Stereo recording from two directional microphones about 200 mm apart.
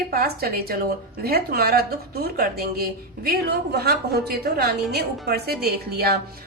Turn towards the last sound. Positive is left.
turn(degrees=-50)  # may be behind; listen again after turning